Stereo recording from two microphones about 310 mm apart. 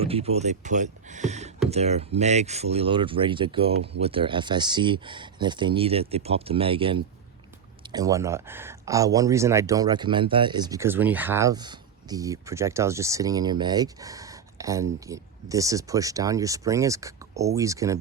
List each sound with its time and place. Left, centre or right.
0.0 s speech: centre